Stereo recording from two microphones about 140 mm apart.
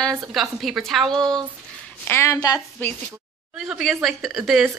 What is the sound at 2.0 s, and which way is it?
Speech, 20° left (ahead or behind).